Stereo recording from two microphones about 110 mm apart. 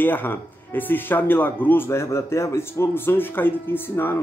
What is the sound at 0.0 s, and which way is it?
Speech, 20° left (ahead or behind).